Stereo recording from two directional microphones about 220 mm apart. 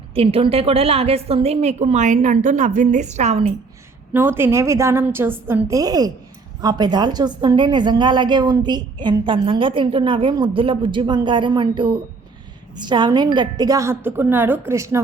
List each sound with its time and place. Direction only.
0.1 s a woman's voice: 25° right (ahead or behind)
4.1 s a woman's voice: 10° right (ahead or behind)